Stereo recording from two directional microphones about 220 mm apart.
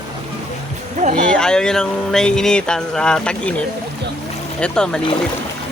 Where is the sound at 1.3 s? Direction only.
5° left (ahead or behind).